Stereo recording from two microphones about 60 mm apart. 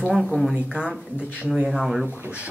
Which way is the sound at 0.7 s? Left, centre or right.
Centre.